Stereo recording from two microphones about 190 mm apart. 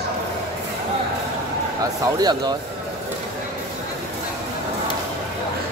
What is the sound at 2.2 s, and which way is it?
Speech, 20° right (ahead or behind).